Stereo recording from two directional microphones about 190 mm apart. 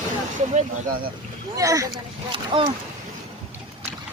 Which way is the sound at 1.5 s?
15° right (ahead or behind).